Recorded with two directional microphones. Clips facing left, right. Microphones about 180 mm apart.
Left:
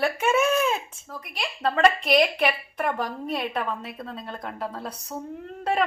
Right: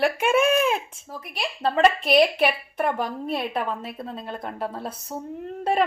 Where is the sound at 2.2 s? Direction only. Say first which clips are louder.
Right 3 dB; 5° right (ahead or behind).